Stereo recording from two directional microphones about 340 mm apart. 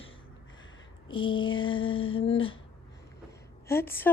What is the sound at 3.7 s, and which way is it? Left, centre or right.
Speech, centre.